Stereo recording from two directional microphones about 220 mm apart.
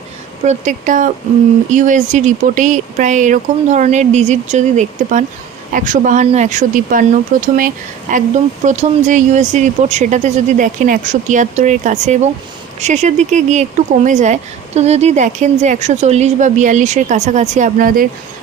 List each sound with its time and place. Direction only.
0.4 s speech: 35° right (ahead or behind)